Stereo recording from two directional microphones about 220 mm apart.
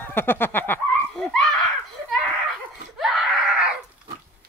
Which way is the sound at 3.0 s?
Centre (ahead or behind).